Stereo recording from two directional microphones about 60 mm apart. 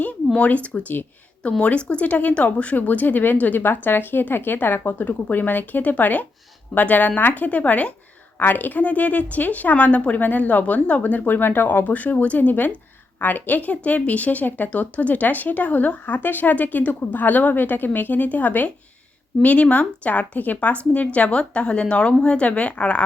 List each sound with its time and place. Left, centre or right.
0.3 s a woman's voice: left